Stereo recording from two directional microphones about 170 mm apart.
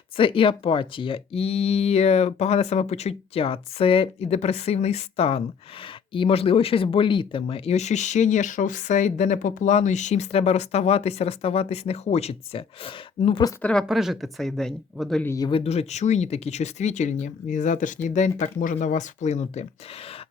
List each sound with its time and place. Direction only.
0.2 s speech: 30° left (ahead or behind)
13.6 s speech: 5° left (ahead or behind)
15.2 s speech: 15° left (ahead or behind)
15.4 s speech: 35° left (ahead or behind)